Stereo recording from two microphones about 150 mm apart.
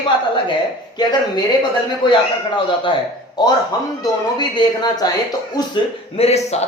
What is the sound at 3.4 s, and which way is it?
Speech, 30° left (ahead or behind).